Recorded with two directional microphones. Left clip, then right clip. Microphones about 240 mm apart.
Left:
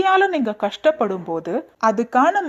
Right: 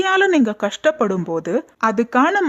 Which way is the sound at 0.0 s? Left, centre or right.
Centre.